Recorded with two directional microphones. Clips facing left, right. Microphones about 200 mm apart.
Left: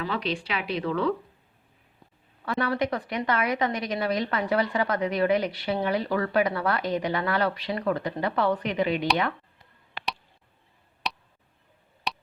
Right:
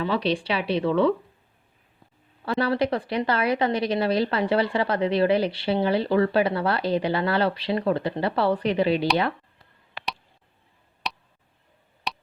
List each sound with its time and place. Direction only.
0.0 s speech: 30° right (ahead or behind)
2.4 s a woman's voice: 30° right (ahead or behind)
11.1 s a sound: centre (ahead or behind)